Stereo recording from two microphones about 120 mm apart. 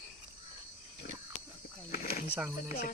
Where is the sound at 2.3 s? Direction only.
15° right (ahead or behind).